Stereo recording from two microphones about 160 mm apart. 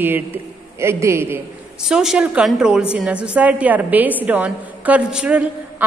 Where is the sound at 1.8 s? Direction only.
5° right (ahead or behind).